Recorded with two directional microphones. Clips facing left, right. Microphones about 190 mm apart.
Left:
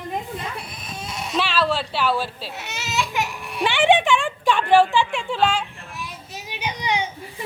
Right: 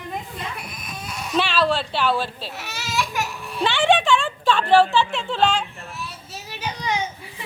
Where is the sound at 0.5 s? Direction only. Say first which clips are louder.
Left 1 dB; 25° left (ahead or behind).